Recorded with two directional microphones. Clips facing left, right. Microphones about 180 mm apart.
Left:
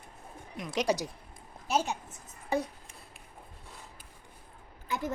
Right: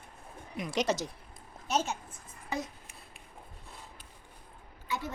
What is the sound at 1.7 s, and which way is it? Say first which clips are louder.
Speech: left 1 dB; 15° left (ahead or behind).